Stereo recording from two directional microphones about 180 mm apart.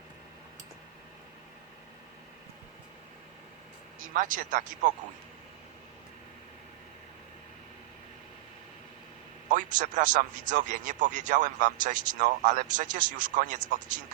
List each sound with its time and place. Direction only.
4.0 s a man's voice: 50° right (ahead or behind)
9.5 s a man's voice: 45° right (ahead or behind)